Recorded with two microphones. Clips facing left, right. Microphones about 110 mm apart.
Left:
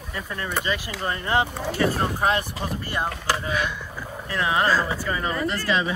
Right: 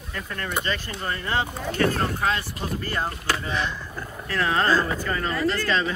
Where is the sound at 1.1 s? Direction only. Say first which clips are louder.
Left 3 dB; 20° left (ahead or behind).